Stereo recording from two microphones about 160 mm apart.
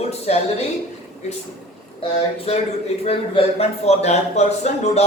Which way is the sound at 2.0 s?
35° left (ahead or behind).